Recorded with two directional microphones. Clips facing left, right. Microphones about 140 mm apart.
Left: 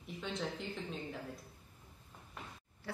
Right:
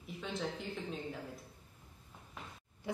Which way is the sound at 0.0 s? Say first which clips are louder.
Right 1 dB; centre (ahead or behind).